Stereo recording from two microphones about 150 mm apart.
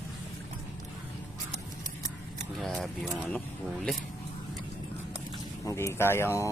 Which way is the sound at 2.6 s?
Centre (ahead or behind).